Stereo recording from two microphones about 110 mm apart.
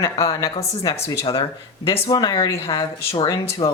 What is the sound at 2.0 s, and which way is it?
A woman's voice, 40° left (ahead or behind).